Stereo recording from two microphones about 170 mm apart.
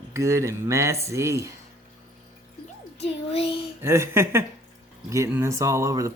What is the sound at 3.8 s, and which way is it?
Speech, 15° right (ahead or behind).